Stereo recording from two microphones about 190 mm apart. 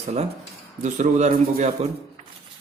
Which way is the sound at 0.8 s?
40° right (ahead or behind).